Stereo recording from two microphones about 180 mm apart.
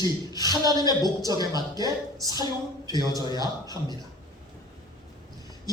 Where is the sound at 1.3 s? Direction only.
20° left (ahead or behind).